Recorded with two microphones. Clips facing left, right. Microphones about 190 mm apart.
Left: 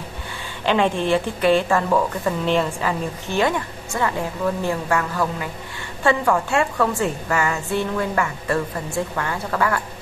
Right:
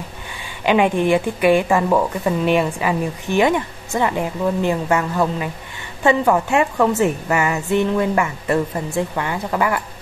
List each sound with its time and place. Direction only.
0.7 s a woman's voice: 15° right (ahead or behind)